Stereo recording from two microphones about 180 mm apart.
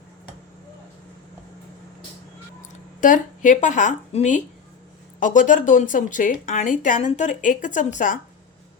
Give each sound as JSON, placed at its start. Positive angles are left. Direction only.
{"t": 3.0, "sound": "speech", "side_deg": 45}